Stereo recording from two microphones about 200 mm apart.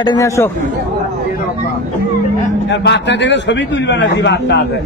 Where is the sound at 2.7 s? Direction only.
60° left (ahead or behind).